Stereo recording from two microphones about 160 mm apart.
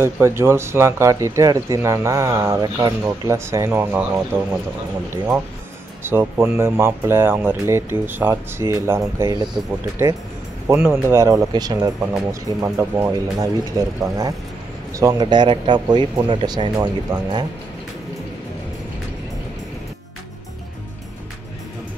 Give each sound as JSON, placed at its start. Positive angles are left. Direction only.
{"t": 0.0, "sound": "speech", "side_deg": -15}
{"t": 6.0, "sound": "speech", "side_deg": -15}
{"t": 10.7, "sound": "speech", "side_deg": -15}